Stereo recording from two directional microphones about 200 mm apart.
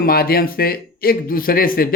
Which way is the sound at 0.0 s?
50° left (ahead or behind).